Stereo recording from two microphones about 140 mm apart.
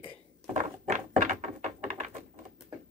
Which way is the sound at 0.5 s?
60° right (ahead or behind).